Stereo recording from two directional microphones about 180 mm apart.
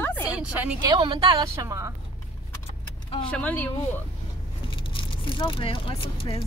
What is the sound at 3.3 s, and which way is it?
Speech, 5° left (ahead or behind).